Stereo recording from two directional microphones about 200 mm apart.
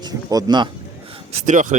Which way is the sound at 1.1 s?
35° right (ahead or behind).